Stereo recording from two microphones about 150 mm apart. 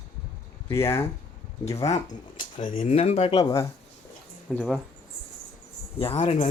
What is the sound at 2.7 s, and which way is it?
Speech, 40° left (ahead or behind).